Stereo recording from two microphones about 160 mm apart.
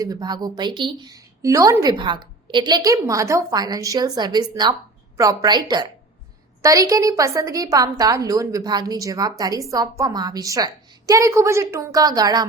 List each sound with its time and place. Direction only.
0.0 s a woman's voice: 25° right (ahead or behind)